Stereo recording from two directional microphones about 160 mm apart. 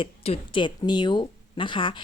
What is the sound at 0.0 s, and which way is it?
Speech, 30° left (ahead or behind).